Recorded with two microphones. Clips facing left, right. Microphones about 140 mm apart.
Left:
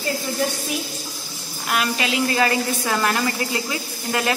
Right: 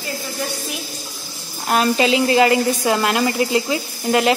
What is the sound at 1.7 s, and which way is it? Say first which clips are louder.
A woman's voice: right 7 dB; 30° right (ahead or behind).